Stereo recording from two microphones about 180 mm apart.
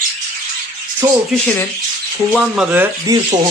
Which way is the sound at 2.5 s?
10° right (ahead or behind).